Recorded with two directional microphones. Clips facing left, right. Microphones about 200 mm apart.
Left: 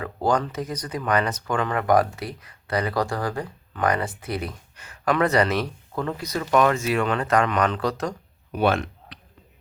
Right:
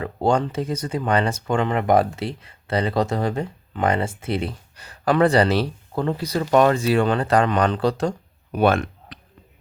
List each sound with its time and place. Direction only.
0.0 s speech: 25° right (ahead or behind)
8.5 s speech: 50° right (ahead or behind)